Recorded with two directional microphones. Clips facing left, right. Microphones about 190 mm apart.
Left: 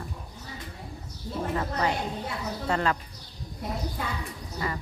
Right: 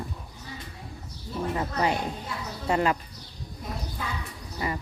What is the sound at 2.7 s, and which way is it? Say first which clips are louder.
Speech: right 3 dB; 15° right (ahead or behind).